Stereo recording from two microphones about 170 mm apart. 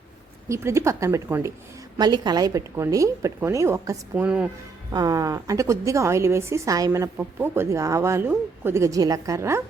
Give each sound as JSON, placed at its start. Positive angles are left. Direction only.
{"t": 0.4, "sound": "a woman's voice", "side_deg": -15}
{"t": 4.9, "sound": "a woman's voice", "side_deg": -20}